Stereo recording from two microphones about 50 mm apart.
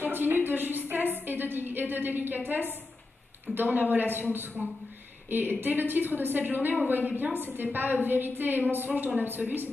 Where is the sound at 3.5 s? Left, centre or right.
Right.